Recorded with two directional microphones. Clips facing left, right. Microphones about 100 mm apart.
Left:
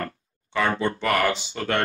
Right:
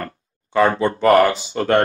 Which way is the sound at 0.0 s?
40° right (ahead or behind).